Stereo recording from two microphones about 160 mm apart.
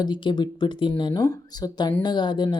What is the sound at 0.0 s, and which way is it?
Speech, 30° left (ahead or behind).